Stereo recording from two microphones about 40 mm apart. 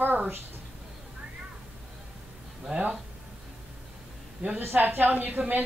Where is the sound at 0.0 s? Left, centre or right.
Right.